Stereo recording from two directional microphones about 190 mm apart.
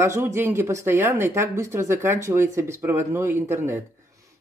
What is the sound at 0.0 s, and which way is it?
Speech, 15° right (ahead or behind).